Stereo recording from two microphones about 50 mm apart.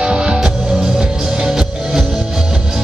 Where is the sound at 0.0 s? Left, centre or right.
Centre.